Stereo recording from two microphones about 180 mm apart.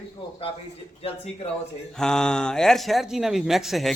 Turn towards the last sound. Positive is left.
turn(degrees=0)  # may be behind; listen again after turning